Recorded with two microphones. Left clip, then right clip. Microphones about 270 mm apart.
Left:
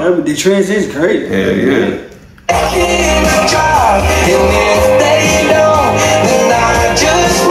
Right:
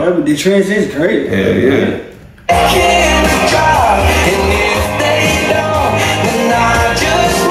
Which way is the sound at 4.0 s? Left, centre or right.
Left.